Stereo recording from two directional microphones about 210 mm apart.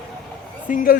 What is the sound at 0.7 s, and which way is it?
Speech, 40° left (ahead or behind).